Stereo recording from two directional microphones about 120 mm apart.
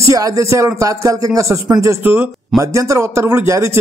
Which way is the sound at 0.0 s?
30° right (ahead or behind).